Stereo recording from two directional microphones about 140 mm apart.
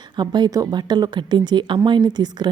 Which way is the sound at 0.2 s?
30° right (ahead or behind).